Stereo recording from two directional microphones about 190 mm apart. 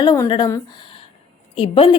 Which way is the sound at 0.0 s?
20° left (ahead or behind).